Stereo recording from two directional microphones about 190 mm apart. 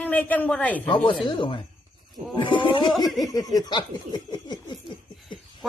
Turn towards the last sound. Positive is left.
turn(degrees=20)  # may be behind; listen again after turning